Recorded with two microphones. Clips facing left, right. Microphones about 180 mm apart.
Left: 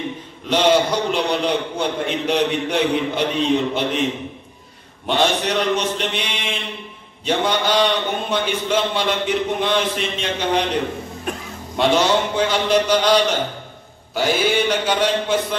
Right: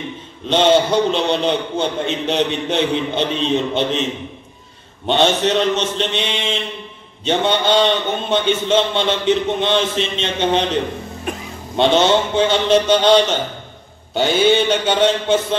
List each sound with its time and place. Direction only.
0.5 s a man's voice: 25° right (ahead or behind)
5.0 s a man's voice: 25° right (ahead or behind)